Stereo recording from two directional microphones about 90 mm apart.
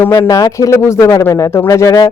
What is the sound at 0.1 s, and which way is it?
Speech, 45° left (ahead or behind).